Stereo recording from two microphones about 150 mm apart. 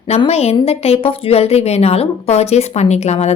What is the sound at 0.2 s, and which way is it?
A woman's voice, 45° left (ahead or behind).